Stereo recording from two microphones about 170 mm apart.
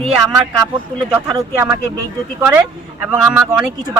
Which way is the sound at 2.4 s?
10° right (ahead or behind).